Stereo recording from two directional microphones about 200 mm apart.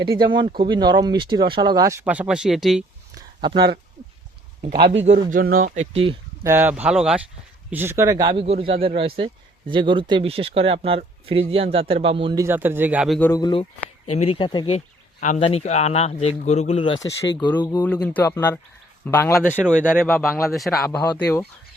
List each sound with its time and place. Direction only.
0.1 s speech: 20° right (ahead or behind); by 2.8 s centre (ahead or behind)
3.2 s a sound: 25° right (ahead or behind)
4.6 s speech: 30° right (ahead or behind)
5.3 s speech: 45° right (ahead or behind); by 6.1 s 30° right (ahead or behind)
6.4 s speech: 10° right (ahead or behind)
13.1 s speech: 15° left (ahead or behind); by 16.9 s 30° left (ahead or behind)
16.9 s speech: 65° left (ahead or behind)
17.6 s speech: 20° left (ahead or behind)
17.8 s speech: 5° left (ahead or behind)